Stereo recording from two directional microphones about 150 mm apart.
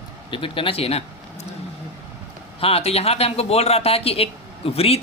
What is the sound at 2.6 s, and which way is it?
Speech, 40° left (ahead or behind).